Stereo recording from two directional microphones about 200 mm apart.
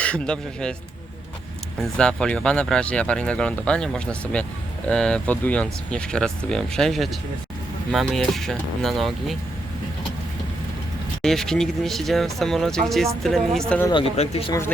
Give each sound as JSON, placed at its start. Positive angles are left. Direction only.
{"t": 0.0, "sound": "speech", "side_deg": 5}
{"t": 2.0, "sound": "speech", "side_deg": 5}
{"t": 11.2, "sound": "speech", "side_deg": 0}
{"t": 13.9, "sound": "speech", "side_deg": 30}